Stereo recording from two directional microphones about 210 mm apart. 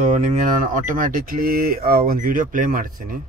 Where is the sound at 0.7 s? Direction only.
40° right (ahead or behind).